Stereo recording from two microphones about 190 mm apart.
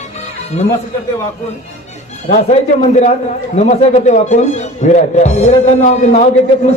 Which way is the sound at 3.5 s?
35° left (ahead or behind).